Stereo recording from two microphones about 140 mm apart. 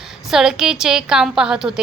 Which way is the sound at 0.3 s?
5° right (ahead or behind).